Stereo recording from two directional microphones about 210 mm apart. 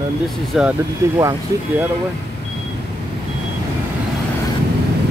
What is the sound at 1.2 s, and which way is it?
Speech, 15° right (ahead or behind).